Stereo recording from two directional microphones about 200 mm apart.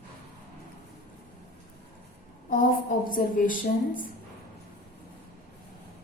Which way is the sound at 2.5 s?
45° left (ahead or behind).